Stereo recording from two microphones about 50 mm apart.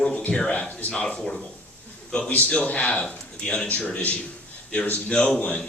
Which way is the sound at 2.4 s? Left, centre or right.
Left.